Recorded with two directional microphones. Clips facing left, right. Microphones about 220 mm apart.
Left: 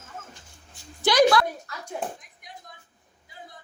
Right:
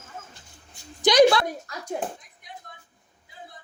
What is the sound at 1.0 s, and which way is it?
Speech, 20° right (ahead or behind).